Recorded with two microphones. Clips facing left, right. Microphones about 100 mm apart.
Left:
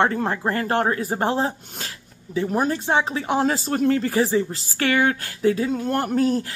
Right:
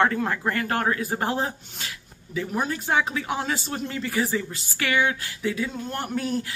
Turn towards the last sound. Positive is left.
turn(degrees=40)  # may be behind; listen again after turning